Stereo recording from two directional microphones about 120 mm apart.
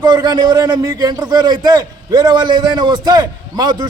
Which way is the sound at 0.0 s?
35° right (ahead or behind).